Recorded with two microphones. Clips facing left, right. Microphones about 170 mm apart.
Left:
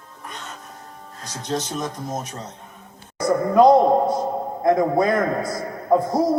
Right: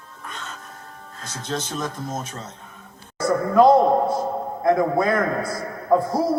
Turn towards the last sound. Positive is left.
turn(degrees=20)  # may be behind; listen again after turning